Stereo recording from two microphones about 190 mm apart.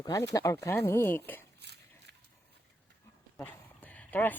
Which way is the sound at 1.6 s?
60° right (ahead or behind).